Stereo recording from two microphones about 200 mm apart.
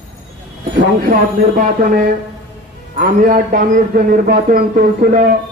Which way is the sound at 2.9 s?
40° right (ahead or behind).